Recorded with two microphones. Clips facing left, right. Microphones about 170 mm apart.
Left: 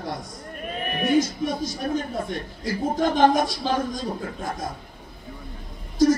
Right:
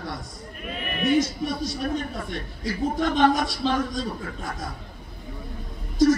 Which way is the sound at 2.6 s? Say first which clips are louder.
Left 1 dB; 45° left (ahead or behind).